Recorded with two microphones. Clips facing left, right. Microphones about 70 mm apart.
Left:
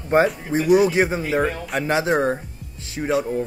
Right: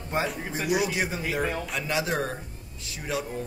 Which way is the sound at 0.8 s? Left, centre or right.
Left.